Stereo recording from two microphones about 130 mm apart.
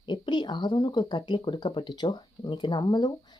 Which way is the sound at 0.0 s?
35° left (ahead or behind).